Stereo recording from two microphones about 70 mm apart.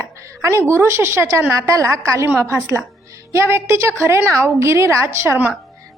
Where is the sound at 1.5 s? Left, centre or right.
Right.